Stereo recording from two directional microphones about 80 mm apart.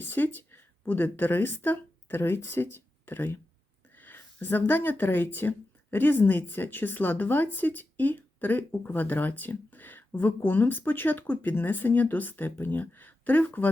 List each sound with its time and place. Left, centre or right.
0.0 s speech: left